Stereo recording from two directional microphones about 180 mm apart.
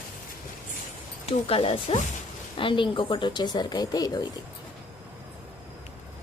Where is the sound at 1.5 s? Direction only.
30° left (ahead or behind).